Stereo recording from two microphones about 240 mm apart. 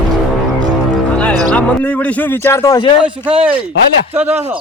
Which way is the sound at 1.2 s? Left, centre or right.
Centre.